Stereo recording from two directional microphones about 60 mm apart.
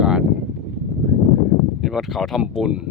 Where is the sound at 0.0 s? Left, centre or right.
Centre.